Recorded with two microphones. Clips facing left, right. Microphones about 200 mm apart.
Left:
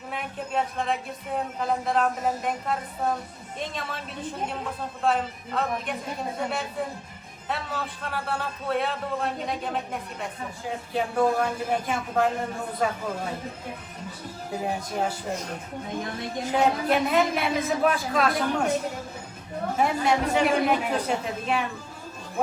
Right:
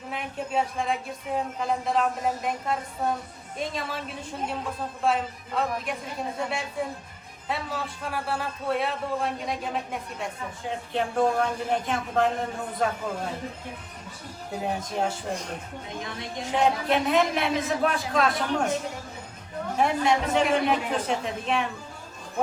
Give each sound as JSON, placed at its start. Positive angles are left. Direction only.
{"t": 0.1, "sound": "speech", "side_deg": 0}
{"t": 5.0, "sound": "speech", "side_deg": 0}
{"t": 7.4, "sound": "speech", "side_deg": 0}
{"t": 14.6, "sound": "speech", "side_deg": 5}
{"t": 16.4, "sound": "speech", "side_deg": 5}
{"t": 19.7, "sound": "speech", "side_deg": 0}